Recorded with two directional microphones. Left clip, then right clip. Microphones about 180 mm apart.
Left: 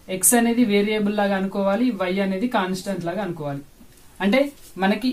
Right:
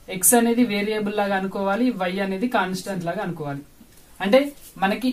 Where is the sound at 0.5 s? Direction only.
20° left (ahead or behind).